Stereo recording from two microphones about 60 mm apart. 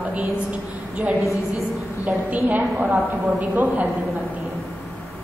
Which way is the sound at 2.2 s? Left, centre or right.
Right.